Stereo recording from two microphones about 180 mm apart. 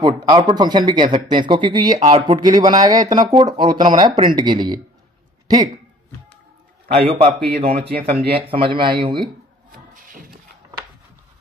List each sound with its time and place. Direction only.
0.0 s speech: 25° right (ahead or behind)
7.0 s a man's voice: 30° right (ahead or behind)
9.7 s vocal music: 55° right (ahead or behind)